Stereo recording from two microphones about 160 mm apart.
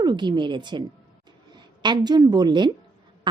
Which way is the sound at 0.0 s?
30° right (ahead or behind).